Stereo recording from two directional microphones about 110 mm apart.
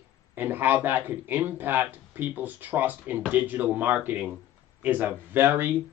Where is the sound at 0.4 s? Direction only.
20° right (ahead or behind).